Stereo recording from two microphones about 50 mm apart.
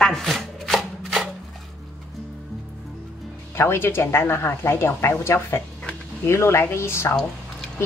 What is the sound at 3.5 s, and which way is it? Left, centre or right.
Speech, left.